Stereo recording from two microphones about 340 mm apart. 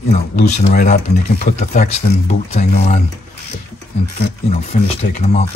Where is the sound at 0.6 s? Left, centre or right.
Left.